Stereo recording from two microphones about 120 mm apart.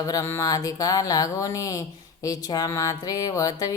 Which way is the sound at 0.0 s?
25° left (ahead or behind).